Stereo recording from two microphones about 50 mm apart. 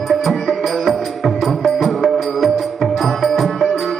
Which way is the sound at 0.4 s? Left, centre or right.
Centre.